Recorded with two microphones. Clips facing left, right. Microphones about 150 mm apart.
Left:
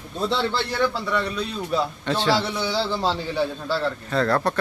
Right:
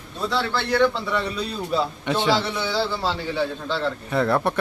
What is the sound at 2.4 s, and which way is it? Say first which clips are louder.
A man's voice: even; 15° left (ahead or behind).